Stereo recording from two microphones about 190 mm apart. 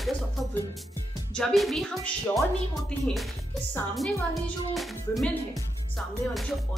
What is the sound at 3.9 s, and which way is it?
A woman's voice, centre (ahead or behind).